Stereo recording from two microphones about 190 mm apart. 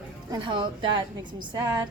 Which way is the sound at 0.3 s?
25° right (ahead or behind).